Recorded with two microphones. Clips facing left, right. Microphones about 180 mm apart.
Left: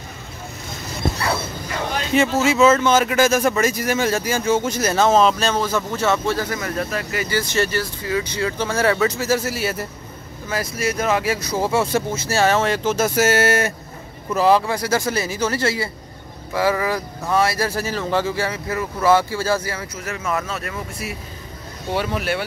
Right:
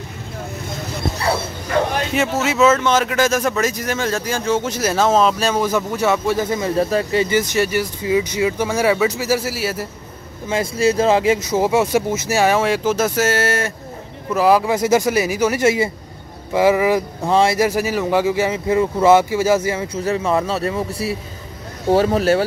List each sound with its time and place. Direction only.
2.1 s speech: centre (ahead or behind)
10.5 s speech: 25° right (ahead or behind); by 13.7 s 10° left (ahead or behind)
14.3 s speech: 5° right (ahead or behind)
14.7 s speech: 20° right (ahead or behind); by 22.4 s 35° right (ahead or behind)